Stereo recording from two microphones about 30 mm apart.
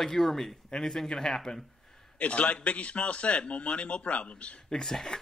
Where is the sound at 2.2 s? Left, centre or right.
Left.